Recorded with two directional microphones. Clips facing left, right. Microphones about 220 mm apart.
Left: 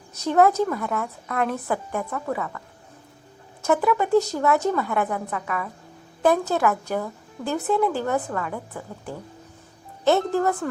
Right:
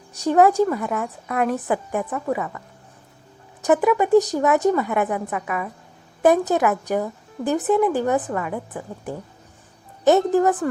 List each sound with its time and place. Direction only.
0.3 s speech: 15° right (ahead or behind)
3.6 s speech: 15° right (ahead or behind)